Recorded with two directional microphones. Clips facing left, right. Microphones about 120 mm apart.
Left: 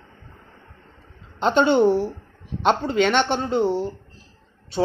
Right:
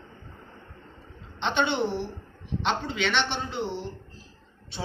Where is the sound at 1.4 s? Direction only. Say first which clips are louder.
Left 9 dB; 40° left (ahead or behind).